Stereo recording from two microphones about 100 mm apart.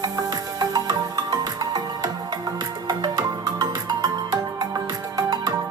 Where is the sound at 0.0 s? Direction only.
40° right (ahead or behind).